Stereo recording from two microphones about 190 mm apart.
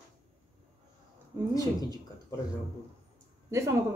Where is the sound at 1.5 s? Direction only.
20° left (ahead or behind).